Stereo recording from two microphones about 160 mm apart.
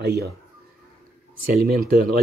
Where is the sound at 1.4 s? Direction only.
70° right (ahead or behind).